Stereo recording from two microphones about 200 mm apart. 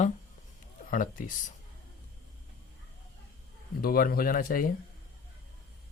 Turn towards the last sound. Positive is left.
turn(degrees=45)  # may be behind; listen again after turning